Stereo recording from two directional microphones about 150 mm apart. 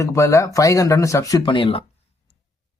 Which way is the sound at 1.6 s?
35° left (ahead or behind).